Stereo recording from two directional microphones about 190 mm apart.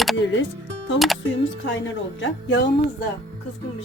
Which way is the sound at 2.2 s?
70° left (ahead or behind).